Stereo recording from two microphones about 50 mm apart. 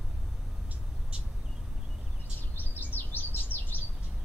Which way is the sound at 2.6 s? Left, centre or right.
Left.